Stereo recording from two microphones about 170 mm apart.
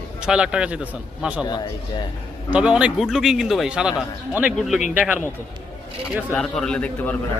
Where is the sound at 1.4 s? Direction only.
25° left (ahead or behind).